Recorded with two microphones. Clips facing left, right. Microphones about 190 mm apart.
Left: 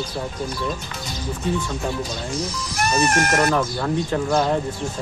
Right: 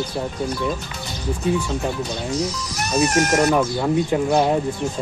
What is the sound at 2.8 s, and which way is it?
Speech, 55° left (ahead or behind).